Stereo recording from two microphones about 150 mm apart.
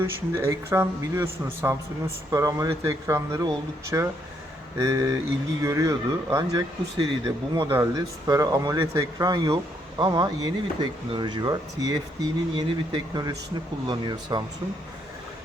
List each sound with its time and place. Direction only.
0.0 s speech: 15° right (ahead or behind)
7.7 s speech: 20° right (ahead or behind)